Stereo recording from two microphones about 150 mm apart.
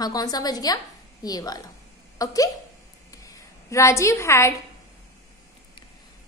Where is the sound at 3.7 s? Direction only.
20° left (ahead or behind).